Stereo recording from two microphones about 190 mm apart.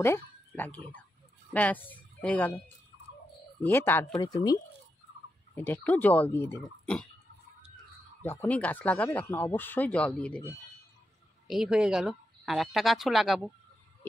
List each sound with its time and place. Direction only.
0.0 s speech: 10° left (ahead or behind)
3.6 s speech: 10° left (ahead or behind)
8.2 s speech: 10° left (ahead or behind)
11.4 s speech: centre (ahead or behind)